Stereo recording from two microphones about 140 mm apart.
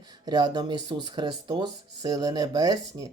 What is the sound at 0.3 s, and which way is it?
Speech, 30° right (ahead or behind).